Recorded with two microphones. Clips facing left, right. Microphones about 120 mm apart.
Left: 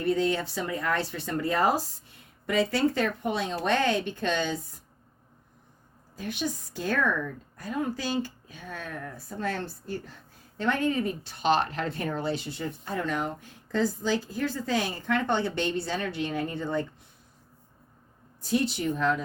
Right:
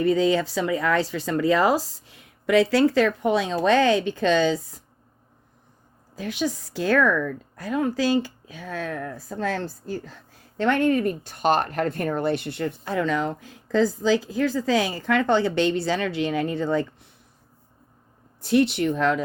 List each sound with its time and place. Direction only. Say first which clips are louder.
0.0 s speech: right 6 dB; 90° right
6.1 s speech: right 5 dB; 90° right
10.6 s speech: right 6 dB; 70° right (ahead or behind); by 17.1 s 90° right
18.4 s speech: right 7 dB; 70° right (ahead or behind); by 19.2 s 90° right